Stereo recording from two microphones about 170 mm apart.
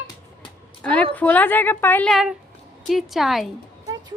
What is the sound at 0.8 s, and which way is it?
A woman's voice, 5° left (ahead or behind).